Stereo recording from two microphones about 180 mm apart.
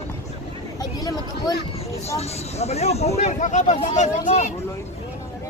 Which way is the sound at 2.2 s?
35° left (ahead or behind).